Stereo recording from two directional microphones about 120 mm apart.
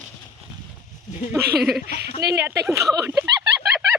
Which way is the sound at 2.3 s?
20° right (ahead or behind).